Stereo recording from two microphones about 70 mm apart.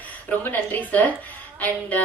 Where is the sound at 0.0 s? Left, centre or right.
Left.